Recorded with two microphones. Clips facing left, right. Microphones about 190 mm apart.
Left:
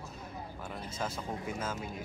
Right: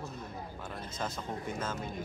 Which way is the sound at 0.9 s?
10° left (ahead or behind).